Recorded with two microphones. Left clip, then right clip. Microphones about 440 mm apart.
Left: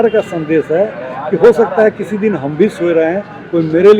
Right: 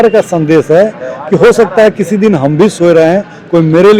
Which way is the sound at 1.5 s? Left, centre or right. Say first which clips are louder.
Right 4 dB; right.